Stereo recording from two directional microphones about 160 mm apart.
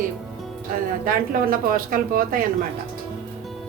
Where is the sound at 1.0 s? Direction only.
60° right (ahead or behind).